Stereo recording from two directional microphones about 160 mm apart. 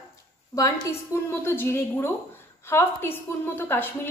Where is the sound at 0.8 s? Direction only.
15° left (ahead or behind).